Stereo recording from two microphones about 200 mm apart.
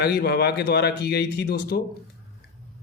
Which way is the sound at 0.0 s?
55° left (ahead or behind).